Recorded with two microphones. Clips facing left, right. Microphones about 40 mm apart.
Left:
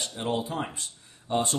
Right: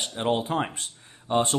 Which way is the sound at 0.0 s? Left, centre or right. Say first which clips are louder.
Right 4 dB; right.